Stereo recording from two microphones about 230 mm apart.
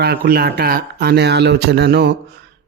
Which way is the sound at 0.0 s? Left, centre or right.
Right.